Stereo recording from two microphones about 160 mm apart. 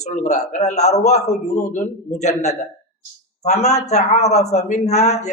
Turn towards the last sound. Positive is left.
turn(degrees=45)  # may be behind; listen again after turning